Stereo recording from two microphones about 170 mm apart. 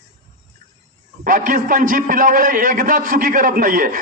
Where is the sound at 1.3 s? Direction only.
50° right (ahead or behind).